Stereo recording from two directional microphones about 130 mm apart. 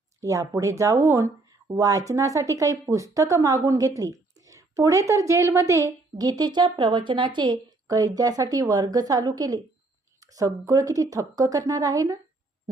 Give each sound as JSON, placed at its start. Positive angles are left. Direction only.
{"t": 0.2, "sound": "speech", "side_deg": -25}